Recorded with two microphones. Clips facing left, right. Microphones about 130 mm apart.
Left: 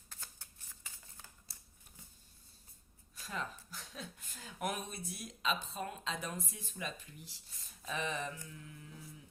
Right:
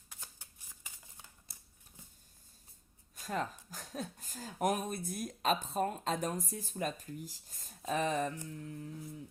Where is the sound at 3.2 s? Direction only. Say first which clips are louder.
Right 6 dB; 45° right (ahead or behind).